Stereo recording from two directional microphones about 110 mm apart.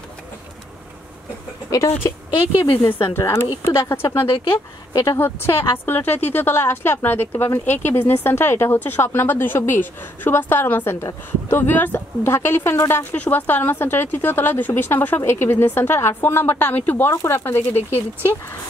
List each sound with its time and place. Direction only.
2.8 s speech: 25° left (ahead or behind)